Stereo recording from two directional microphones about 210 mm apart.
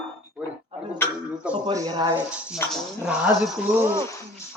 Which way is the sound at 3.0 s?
5° right (ahead or behind).